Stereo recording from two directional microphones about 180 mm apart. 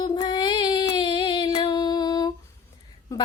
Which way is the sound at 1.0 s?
25° left (ahead or behind).